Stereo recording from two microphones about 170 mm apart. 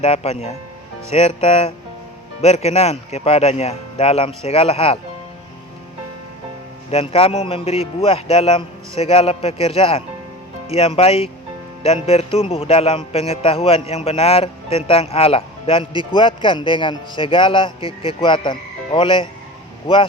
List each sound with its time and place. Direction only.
0.0 s music: 40° left (ahead or behind)
6.9 s music: 35° left (ahead or behind)